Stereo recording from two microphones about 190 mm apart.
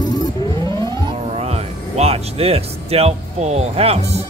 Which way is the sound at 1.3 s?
35° right (ahead or behind).